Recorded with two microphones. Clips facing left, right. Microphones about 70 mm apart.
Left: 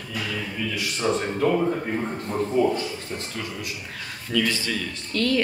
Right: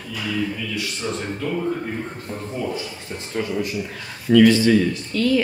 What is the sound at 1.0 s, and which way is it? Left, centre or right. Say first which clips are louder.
Speech: left 6 dB; left.